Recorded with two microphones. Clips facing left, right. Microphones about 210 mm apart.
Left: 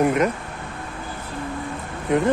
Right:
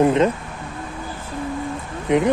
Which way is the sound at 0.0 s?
25° right (ahead or behind).